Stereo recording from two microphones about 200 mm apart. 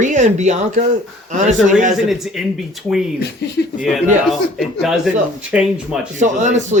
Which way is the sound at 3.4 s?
60° left (ahead or behind).